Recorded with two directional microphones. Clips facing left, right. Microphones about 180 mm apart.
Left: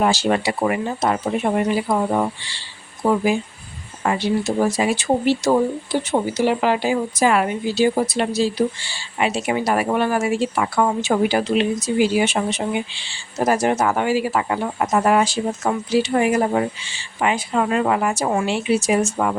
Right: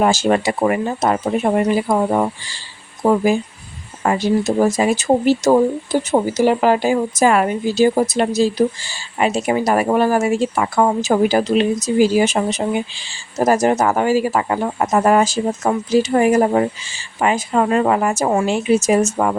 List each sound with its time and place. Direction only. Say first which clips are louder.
0.0 s speech: right 3 dB; 45° right (ahead or behind)